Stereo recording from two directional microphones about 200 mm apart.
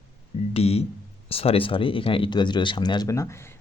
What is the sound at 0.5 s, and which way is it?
Speech, 30° left (ahead or behind).